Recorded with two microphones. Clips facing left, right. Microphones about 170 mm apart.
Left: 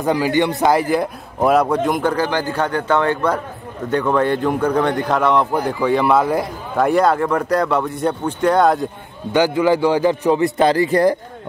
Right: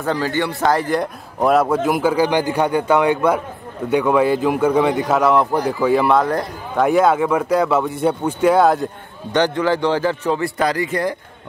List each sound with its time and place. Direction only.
0.0 s a man's voice: 15° left (ahead or behind); by 8.8 s 5° right (ahead or behind)
9.3 s a man's voice: 10° left (ahead or behind); by 11.1 s 35° left (ahead or behind)